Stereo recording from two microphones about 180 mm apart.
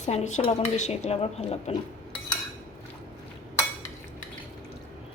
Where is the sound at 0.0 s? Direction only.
40° left (ahead or behind).